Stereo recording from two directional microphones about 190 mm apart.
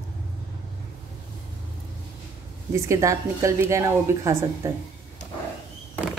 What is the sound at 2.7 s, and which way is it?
A woman's voice, 15° right (ahead or behind).